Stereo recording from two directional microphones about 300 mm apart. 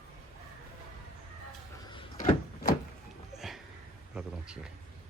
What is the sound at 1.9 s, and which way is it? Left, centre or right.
Power windows, centre.